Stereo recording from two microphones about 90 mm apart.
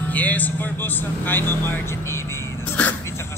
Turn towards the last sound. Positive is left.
turn(degrees=30)  # may be behind; listen again after turning